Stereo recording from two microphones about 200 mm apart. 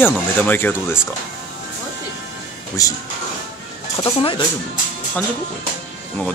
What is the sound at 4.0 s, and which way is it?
Speech, 25° left (ahead or behind).